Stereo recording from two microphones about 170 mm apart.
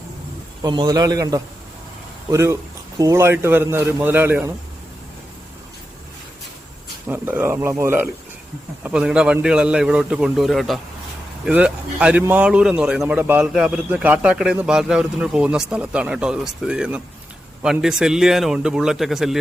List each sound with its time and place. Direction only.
0.6 s a man's voice: 25° right (ahead or behind)
7.1 s a man's voice: 10° right (ahead or behind)